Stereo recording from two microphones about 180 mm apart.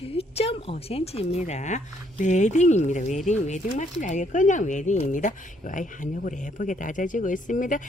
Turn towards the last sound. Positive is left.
turn(degrees=45)  # may be behind; listen again after turning